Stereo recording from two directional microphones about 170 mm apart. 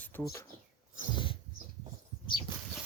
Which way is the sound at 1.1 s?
30° left (ahead or behind).